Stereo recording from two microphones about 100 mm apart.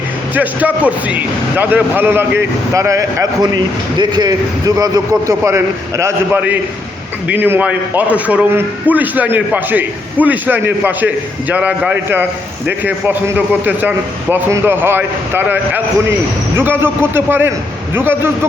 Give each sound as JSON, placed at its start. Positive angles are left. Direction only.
{"t": 0.3, "sound": "a man's voice", "side_deg": -15}
{"t": 2.7, "sound": "speech", "side_deg": -30}
{"t": 3.4, "sound": "a man's voice", "side_deg": -45}